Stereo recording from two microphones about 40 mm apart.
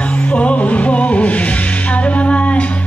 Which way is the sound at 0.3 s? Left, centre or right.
Left.